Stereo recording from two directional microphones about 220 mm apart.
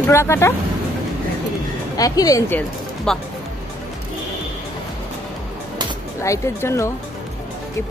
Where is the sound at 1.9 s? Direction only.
15° left (ahead or behind).